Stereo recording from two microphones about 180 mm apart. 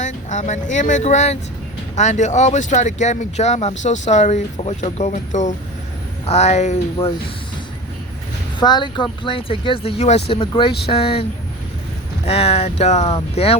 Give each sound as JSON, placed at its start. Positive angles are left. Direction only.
{"t": 0.0, "sound": "speech", "side_deg": 40}
{"t": 8.5, "sound": "speech", "side_deg": 25}